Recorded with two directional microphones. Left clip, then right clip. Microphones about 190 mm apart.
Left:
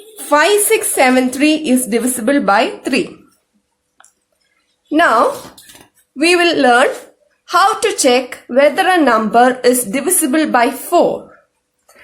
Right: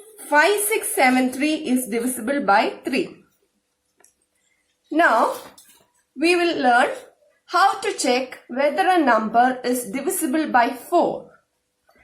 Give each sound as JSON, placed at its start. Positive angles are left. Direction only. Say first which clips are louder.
{"t": 0.3, "sound": "a woman's voice", "louder": "left 6 dB", "side_deg": 40}
{"t": 4.9, "sound": "a woman's voice", "louder": "left 5 dB", "side_deg": 50}
{"t": 6.1, "sound": "a woman's voice", "louder": "left 8 dB", "side_deg": 50}